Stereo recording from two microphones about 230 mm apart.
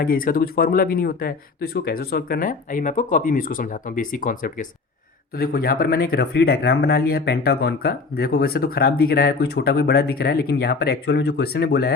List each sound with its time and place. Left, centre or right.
0.0 s speech: left